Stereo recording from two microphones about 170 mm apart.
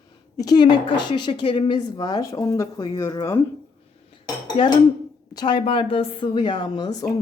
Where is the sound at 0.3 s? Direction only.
25° left (ahead or behind).